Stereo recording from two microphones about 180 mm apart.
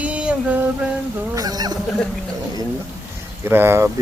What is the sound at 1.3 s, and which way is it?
Speech, 20° right (ahead or behind).